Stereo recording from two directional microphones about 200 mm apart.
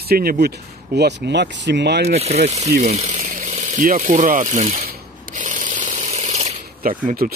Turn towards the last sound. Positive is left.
turn(degrees=-40)  # may be behind; listen again after turning